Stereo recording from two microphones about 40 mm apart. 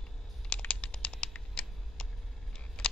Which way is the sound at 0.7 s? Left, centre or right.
Left.